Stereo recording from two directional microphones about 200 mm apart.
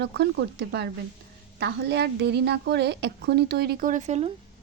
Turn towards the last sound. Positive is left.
turn(degrees=-35)  # may be behind; listen again after turning